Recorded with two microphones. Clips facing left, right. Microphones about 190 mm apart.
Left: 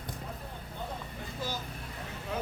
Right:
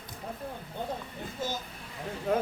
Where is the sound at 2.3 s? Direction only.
50° right (ahead or behind).